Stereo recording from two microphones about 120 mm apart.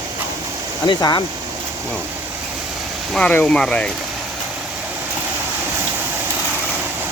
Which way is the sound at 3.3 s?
10° left (ahead or behind).